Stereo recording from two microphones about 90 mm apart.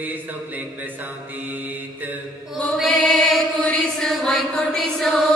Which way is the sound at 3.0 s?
5° left (ahead or behind).